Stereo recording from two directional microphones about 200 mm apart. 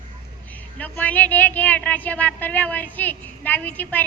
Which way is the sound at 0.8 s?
10° left (ahead or behind).